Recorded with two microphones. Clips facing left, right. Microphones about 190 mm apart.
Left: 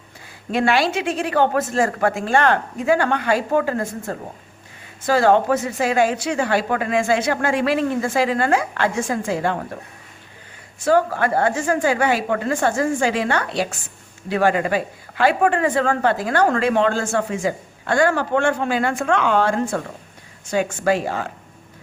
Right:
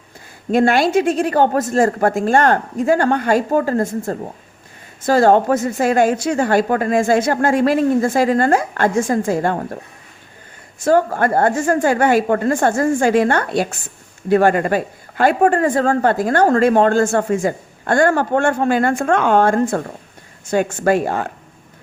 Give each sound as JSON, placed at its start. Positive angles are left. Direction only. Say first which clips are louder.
{"t": 0.5, "sound": "speech", "louder": "right 5 dB", "side_deg": -45}
{"t": 10.8, "sound": "speech", "louder": "right 3 dB", "side_deg": -45}